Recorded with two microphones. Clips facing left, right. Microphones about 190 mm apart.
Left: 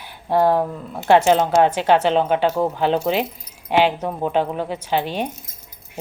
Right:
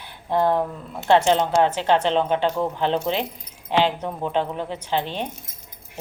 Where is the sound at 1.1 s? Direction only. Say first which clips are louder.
Left 3 dB; 10° left (ahead or behind).